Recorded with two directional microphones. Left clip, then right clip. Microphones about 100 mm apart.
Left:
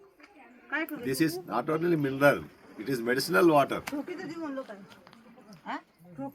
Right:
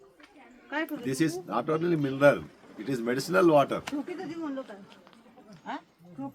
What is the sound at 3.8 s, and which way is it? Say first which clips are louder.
Speech: right 1 dB; 35° left (ahead or behind).